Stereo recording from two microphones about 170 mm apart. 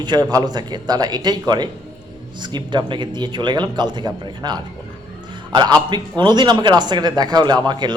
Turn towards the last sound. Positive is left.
turn(degrees=-25)  # may be behind; listen again after turning